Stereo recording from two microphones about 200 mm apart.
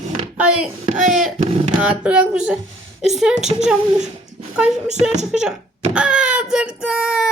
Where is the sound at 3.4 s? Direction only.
35° right (ahead or behind).